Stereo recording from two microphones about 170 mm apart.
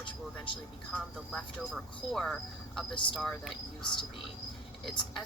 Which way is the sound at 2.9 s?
30° left (ahead or behind).